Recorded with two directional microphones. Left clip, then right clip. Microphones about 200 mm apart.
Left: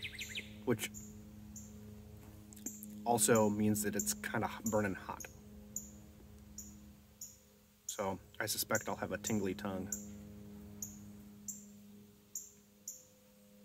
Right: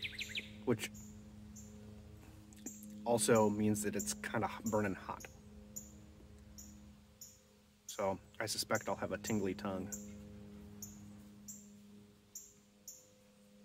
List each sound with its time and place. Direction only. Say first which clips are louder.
0.0 s chirp: right 1 dB; 25° right (ahead or behind)
0.7 s speech: left 1 dB; 5° left (ahead or behind)
2.5 s speech: left 2 dB; 5° left (ahead or behind)
7.9 s speech: right 2 dB; 5° left (ahead or behind)